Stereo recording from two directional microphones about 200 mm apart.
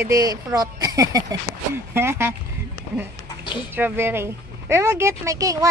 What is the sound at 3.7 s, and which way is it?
Speech, 10° right (ahead or behind).